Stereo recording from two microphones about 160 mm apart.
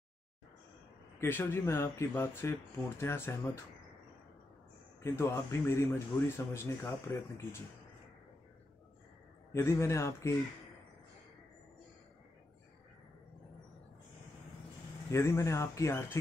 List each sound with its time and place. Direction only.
1.2 s speech: 15° left (ahead or behind)
5.0 s speech: 15° left (ahead or behind)
9.5 s speech: 15° left (ahead or behind)
15.0 s speech: 20° left (ahead or behind)